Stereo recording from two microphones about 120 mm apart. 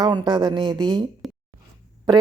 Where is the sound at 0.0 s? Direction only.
40° right (ahead or behind).